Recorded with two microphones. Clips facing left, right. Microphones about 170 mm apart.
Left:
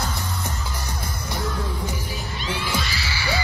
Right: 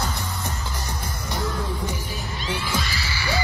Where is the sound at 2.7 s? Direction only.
40° right (ahead or behind).